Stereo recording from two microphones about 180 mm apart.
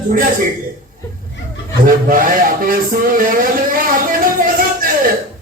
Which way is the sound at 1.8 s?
50° right (ahead or behind).